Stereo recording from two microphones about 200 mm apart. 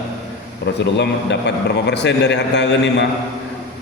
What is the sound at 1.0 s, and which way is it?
A man's voice, 60° left (ahead or behind).